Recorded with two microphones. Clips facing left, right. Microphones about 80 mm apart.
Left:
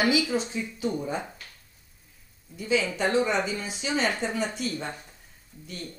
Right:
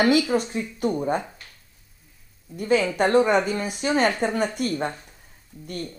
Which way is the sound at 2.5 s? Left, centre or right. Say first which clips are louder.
Right 5 dB; right.